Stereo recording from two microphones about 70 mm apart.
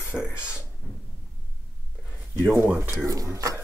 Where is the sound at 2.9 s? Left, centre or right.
Right.